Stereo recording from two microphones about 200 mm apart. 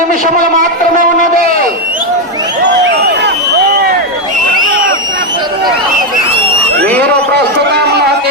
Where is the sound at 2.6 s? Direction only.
55° right (ahead or behind).